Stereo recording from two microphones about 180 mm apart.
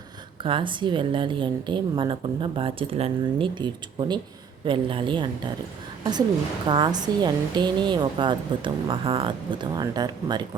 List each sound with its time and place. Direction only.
0.4 s a woman's voice: 25° right (ahead or behind)
6.7 s a woman's voice: 25° right (ahead or behind)